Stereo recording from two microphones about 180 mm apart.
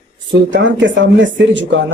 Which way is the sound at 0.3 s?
85° right.